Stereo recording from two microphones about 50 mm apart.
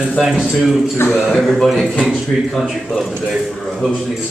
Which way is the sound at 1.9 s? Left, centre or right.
Centre.